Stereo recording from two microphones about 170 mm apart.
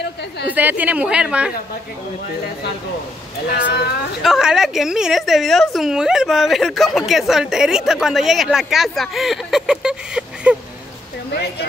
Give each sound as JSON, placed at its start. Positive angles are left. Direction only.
{"t": 0.5, "sound": "a woman's voice", "side_deg": -10}
{"t": 3.4, "sound": "speech", "side_deg": 75}
{"t": 4.2, "sound": "a woman's voice", "side_deg": -5}